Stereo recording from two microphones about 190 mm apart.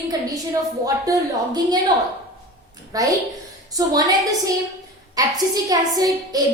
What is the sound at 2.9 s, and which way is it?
A woman's voice, 20° right (ahead or behind).